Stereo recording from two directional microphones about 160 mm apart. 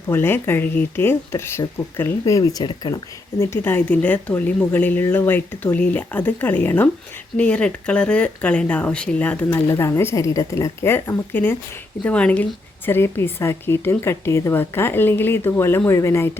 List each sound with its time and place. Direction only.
0.1 s a woman's voice: 15° left (ahead or behind)
3.4 s a woman's voice: 15° left (ahead or behind)